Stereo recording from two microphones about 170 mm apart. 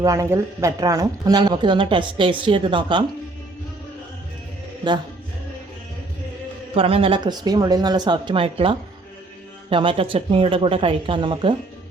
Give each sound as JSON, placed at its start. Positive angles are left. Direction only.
{"t": 0.0, "sound": "speech", "side_deg": -20}
{"t": 6.7, "sound": "speech", "side_deg": -35}